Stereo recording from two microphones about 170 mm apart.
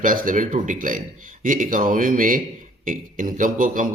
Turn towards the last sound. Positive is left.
turn(degrees=-50)  # may be behind; listen again after turning